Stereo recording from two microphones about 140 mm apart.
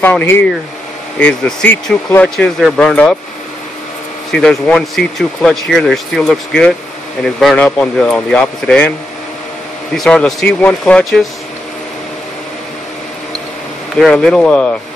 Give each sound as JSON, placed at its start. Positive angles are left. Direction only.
{"t": 0.0, "sound": "speech", "side_deg": 15}
{"t": 4.3, "sound": "speech", "side_deg": 5}
{"t": 9.9, "sound": "speech", "side_deg": 5}
{"t": 13.9, "sound": "speech", "side_deg": 5}